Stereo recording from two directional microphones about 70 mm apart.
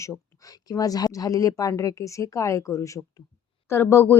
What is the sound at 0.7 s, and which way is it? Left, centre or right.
Speech, left.